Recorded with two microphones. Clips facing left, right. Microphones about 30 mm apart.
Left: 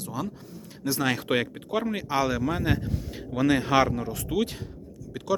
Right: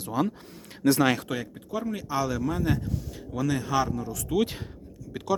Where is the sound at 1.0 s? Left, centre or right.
Centre.